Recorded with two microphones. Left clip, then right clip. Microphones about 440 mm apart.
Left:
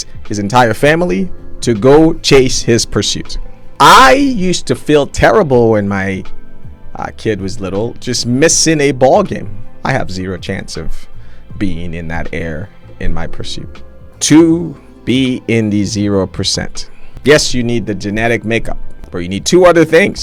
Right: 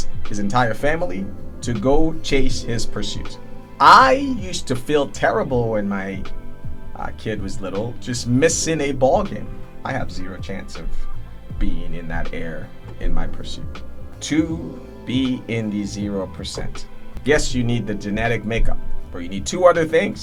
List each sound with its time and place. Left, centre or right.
0.0 s speech: left
9.8 s speech: left
11.5 s speech: left
14.2 s speech: left
15.0 s speech: left
17.2 s speech: left
19.1 s speech: left